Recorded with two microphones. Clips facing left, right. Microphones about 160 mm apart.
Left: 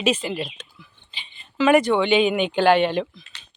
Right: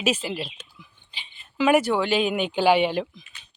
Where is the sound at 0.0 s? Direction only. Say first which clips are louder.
Left 3 dB; 5° right (ahead or behind).